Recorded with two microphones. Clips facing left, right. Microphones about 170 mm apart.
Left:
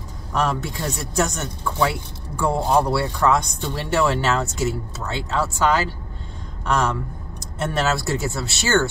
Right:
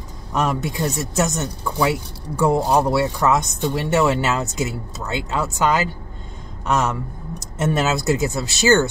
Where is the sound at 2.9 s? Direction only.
20° right (ahead or behind).